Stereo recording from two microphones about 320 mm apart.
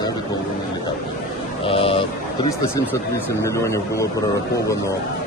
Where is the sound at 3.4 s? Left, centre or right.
Centre.